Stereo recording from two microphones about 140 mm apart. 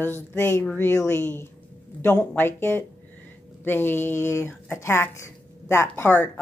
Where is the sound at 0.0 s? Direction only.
15° left (ahead or behind).